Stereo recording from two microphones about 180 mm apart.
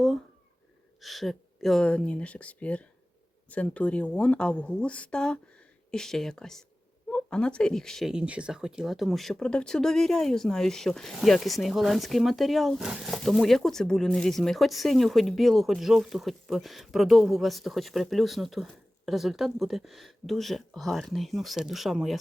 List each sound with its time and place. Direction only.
1.0 s speech: centre (ahead or behind)